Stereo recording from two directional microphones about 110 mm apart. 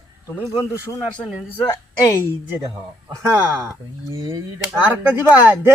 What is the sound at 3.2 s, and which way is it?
Speech, 25° right (ahead or behind).